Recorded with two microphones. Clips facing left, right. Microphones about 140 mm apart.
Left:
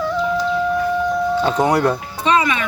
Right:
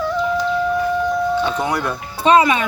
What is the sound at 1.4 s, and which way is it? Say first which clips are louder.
Speech: left 4 dB; 35° left (ahead or behind).